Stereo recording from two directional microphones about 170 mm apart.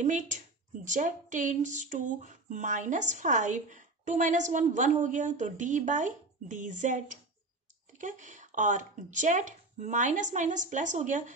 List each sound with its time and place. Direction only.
0.0 s speech: 45° right (ahead or behind)